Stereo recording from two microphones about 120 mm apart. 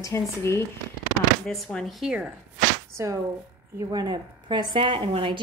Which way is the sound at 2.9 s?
25° right (ahead or behind).